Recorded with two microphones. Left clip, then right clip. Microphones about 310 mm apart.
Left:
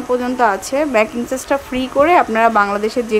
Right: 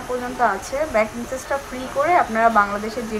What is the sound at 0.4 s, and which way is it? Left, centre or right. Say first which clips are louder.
Speech: left 4 dB; left.